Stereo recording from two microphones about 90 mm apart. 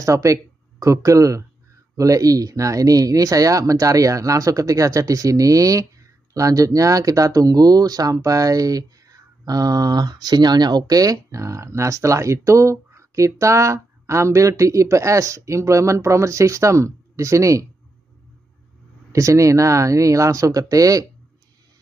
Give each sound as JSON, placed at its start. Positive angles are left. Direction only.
{"t": 0.0, "sound": "speech", "side_deg": -35}
{"t": 19.1, "sound": "speech", "side_deg": -35}